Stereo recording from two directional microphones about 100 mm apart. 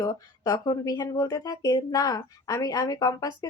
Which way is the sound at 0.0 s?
40° left (ahead or behind).